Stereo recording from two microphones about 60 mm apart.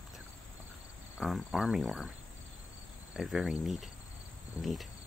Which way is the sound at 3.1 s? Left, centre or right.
Centre.